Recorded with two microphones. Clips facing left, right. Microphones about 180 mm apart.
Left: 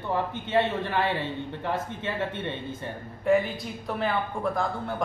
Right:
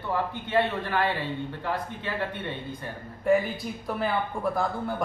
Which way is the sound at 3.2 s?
Centre (ahead or behind).